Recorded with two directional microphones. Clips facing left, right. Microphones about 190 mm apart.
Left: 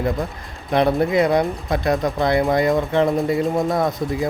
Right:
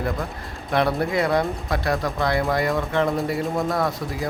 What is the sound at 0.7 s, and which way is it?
Speech, 20° left (ahead or behind).